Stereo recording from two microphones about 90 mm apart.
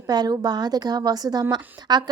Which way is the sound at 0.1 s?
45° right (ahead or behind).